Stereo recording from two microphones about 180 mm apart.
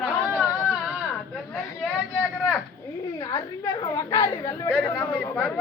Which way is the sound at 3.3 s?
25° left (ahead or behind).